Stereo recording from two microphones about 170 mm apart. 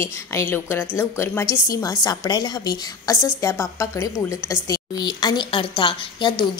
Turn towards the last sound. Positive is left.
turn(degrees=30)  # may be behind; listen again after turning